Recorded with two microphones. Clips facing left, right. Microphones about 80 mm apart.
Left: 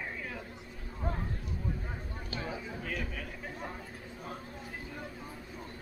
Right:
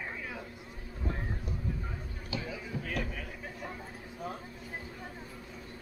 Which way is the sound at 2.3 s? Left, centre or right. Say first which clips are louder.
Even; left.